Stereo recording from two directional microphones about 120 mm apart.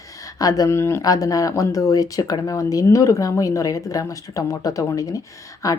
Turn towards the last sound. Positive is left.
turn(degrees=30)  # may be behind; listen again after turning